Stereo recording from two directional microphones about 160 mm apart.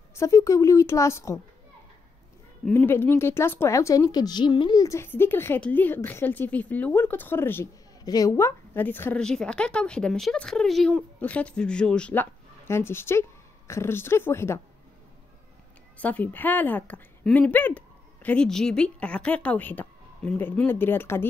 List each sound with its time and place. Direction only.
0.1 s a woman's voice: 20° left (ahead or behind)
2.6 s a woman's voice: 10° left (ahead or behind)
16.0 s a woman's voice: 10° left (ahead or behind)